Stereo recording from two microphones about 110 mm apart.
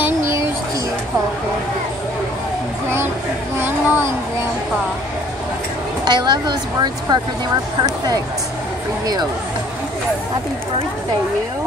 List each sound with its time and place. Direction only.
0.0 s music: 25° right (ahead or behind)
3.5 s speech: 20° right (ahead or behind)
6.0 s speech: 40° right (ahead or behind)
9.0 s speech: 35° right (ahead or behind)